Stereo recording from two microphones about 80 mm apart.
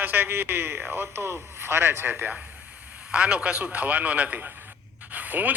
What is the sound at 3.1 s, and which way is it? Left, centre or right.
A man's voice, centre.